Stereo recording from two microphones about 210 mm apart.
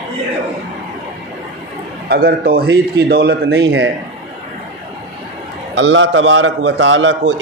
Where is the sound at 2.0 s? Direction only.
45° right (ahead or behind).